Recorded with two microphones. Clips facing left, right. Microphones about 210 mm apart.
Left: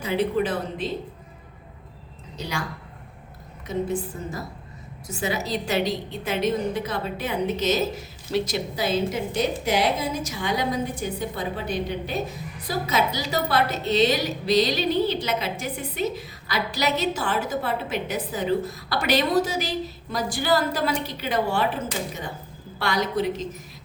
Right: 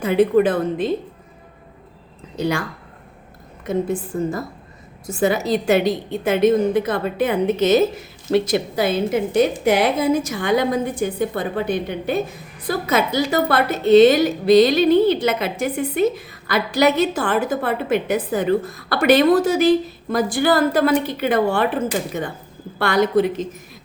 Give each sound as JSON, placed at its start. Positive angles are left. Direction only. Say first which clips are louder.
{"t": 0.0, "sound": "a woman's voice", "louder": "right 8 dB", "side_deg": -55}
{"t": 2.3, "sound": "a woman's voice", "louder": "right 9 dB", "side_deg": -55}
{"t": 3.7, "sound": "a woman's voice", "louder": "right 5 dB", "side_deg": -55}